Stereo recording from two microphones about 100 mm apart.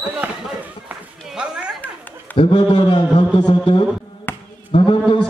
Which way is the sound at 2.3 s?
65° left (ahead or behind).